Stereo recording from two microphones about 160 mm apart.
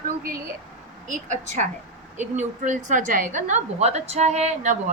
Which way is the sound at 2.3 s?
50° right (ahead or behind).